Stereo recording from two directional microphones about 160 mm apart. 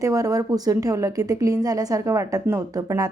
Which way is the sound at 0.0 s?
20° right (ahead or behind).